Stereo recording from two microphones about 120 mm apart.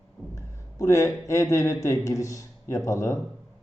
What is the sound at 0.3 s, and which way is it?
A man's voice, 25° left (ahead or behind).